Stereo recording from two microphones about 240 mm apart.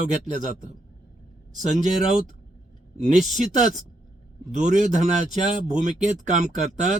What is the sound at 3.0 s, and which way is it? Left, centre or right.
A man's voice, right.